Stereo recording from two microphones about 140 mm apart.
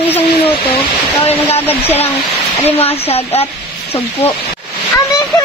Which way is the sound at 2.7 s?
45° left (ahead or behind).